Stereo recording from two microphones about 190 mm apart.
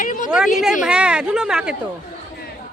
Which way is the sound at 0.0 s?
45° left (ahead or behind).